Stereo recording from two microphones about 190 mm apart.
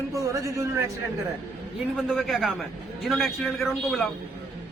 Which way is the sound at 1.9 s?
Centre (ahead or behind).